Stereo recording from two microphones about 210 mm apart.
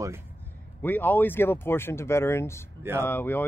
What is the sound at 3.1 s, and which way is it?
Speech, 10° left (ahead or behind).